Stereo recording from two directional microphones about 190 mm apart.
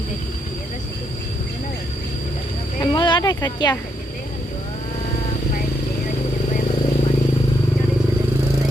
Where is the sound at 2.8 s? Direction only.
25° left (ahead or behind).